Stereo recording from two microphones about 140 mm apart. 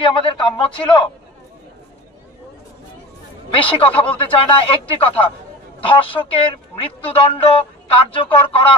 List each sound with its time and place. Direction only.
0.0 s speech: 40° left (ahead or behind)
3.6 s speech: 40° left (ahead or behind)